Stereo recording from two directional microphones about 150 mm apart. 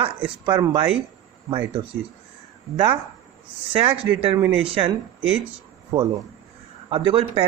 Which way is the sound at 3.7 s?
40° right (ahead or behind).